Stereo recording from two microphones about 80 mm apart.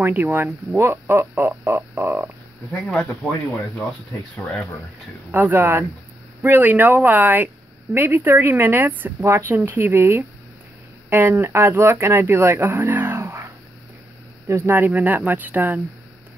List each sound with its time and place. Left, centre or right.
0.0 s speech: right
5.3 s speech: right
14.5 s speech: right